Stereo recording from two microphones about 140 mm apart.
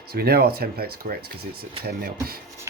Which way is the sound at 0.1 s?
90° right.